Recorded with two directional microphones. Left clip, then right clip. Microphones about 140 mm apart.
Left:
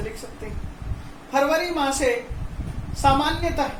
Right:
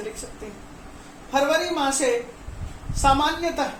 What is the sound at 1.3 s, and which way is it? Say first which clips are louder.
Speech: even; 15° right (ahead or behind).